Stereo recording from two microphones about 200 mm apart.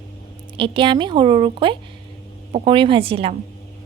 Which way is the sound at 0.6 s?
25° right (ahead or behind).